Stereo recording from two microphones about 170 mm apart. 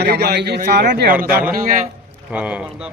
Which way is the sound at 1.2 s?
60° right (ahead or behind).